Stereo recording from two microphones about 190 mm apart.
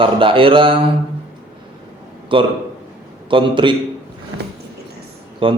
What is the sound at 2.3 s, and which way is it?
A man's voice, 25° right (ahead or behind).